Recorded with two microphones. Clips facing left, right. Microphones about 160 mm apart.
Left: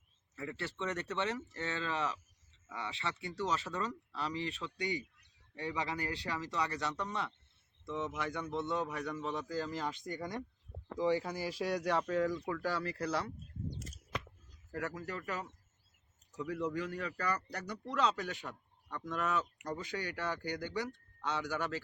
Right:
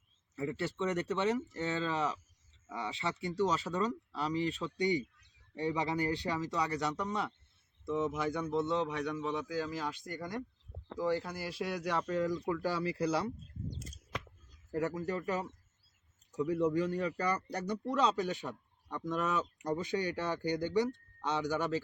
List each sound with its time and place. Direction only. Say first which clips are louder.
0.3 s speech: right 6 dB; 15° right (ahead or behind); by 11.7 s 5° left (ahead or behind)
11.7 s speech: left 1 dB; 5° right (ahead or behind)
14.7 s speech: right 6 dB; 20° right (ahead or behind)